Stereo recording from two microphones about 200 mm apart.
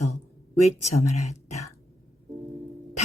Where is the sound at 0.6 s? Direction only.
35° left (ahead or behind).